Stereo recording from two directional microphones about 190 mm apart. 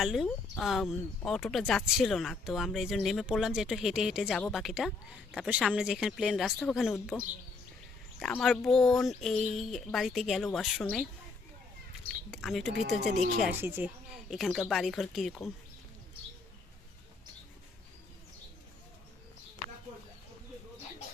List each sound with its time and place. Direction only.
0.0 s speech: centre (ahead or behind)
8.2 s speech: centre (ahead or behind)
12.3 s speech: centre (ahead or behind)
13.0 s speech: 40° right (ahead or behind)
13.4 s speech: 10° right (ahead or behind)